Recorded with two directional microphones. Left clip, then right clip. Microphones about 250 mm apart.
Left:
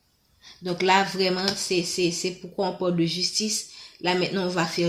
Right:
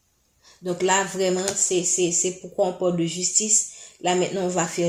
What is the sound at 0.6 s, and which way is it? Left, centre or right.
Speech, left.